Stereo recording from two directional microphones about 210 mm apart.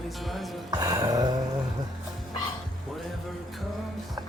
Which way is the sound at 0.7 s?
15° right (ahead or behind).